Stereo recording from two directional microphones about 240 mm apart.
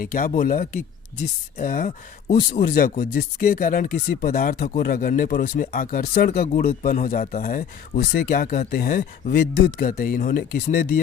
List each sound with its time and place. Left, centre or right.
0.0 s speech: left